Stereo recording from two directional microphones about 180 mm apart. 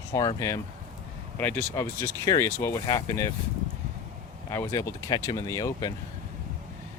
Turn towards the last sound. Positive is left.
turn(degrees=15)  # may be behind; listen again after turning